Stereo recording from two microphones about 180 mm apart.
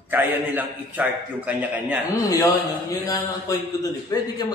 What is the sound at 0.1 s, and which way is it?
Speech, 10° right (ahead or behind).